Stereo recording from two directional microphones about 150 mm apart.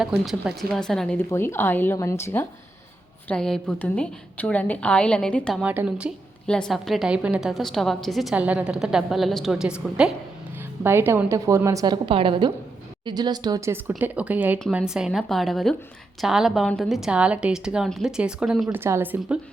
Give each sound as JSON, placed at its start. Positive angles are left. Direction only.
{"t": 0.0, "sound": "a woman's voice", "side_deg": 0}
{"t": 1.3, "sound": "a woman's voice", "side_deg": 15}
{"t": 3.2, "sound": "a woman's voice", "side_deg": 5}
{"t": 5.6, "sound": "speech", "side_deg": -10}
{"t": 6.5, "sound": "a woman's voice", "side_deg": 5}